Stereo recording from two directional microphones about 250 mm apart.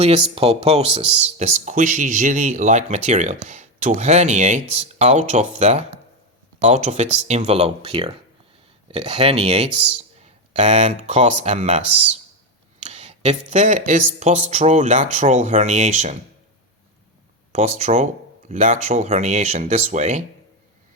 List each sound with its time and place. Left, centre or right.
0.0 s speech: right
12.8 s speech: right
17.5 s speech: right